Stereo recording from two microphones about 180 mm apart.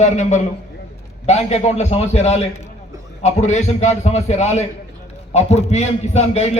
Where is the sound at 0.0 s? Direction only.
40° left (ahead or behind).